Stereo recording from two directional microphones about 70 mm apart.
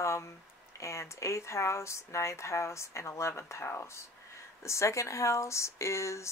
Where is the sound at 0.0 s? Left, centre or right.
Left.